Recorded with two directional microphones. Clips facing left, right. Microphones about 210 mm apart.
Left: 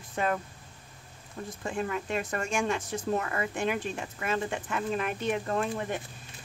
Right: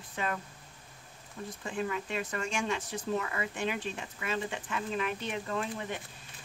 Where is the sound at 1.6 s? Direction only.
50° left (ahead or behind).